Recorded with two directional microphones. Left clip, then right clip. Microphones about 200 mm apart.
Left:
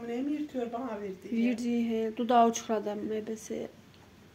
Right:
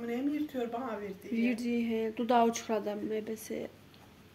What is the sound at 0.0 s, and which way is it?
Speech, 5° right (ahead or behind).